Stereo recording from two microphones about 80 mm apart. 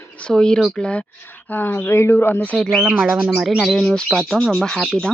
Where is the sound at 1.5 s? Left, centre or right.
Left.